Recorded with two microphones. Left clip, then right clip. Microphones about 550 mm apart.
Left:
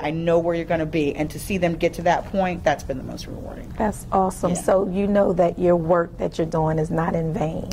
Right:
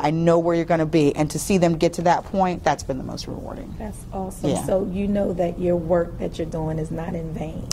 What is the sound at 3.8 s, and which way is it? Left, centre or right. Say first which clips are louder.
A woman's voice: left 12 dB; left.